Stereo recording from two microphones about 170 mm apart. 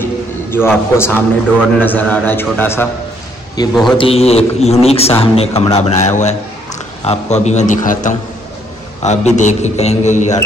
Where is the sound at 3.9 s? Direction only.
35° left (ahead or behind).